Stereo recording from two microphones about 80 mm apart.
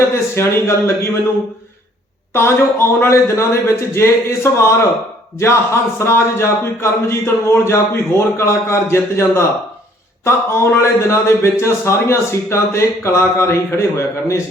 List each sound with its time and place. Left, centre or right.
0.1 s a man's voice: left
2.3 s a man's voice: left